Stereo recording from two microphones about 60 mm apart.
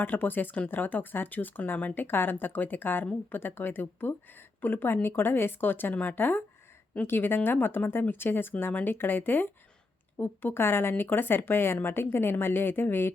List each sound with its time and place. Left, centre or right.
0.0 s speech: left